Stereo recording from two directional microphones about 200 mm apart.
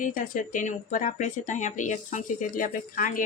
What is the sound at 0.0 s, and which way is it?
Speech, 40° left (ahead or behind).